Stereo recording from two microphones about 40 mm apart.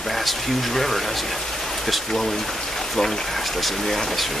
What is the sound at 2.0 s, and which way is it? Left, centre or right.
Rain, centre.